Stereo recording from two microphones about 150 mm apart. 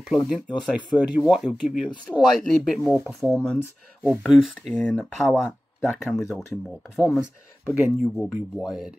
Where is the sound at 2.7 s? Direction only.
10° right (ahead or behind).